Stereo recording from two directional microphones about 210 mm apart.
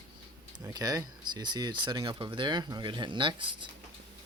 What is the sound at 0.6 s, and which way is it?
Speech, 20° right (ahead or behind).